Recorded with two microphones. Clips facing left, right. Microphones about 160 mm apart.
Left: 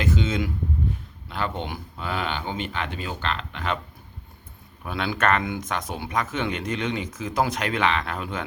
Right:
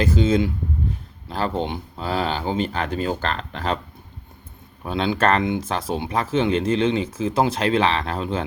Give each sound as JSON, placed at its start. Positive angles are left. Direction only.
{"t": 0.0, "sound": "speech", "side_deg": -35}
{"t": 4.8, "sound": "speech", "side_deg": -25}